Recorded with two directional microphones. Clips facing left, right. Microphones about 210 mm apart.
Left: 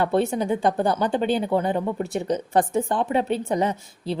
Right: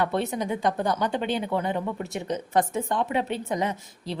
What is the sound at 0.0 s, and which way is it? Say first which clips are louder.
Speech: left 4 dB; 30° left (ahead or behind).